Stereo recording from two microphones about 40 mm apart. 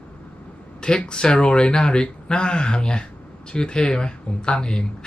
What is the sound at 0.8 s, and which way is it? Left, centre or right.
Speech, left.